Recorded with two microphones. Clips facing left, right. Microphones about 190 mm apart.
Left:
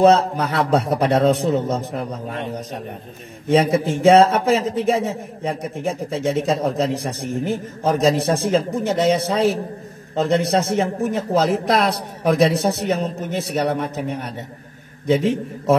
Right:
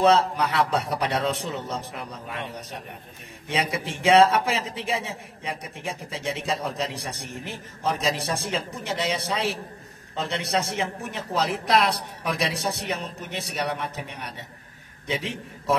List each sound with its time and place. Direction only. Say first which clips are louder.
0.0 s a man's voice: left 5 dB; 45° left (ahead or behind)
3.4 s a man's voice: left 11 dB; 45° left (ahead or behind)